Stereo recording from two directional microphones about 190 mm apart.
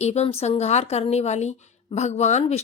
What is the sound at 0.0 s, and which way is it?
A woman's voice, 35° left (ahead or behind).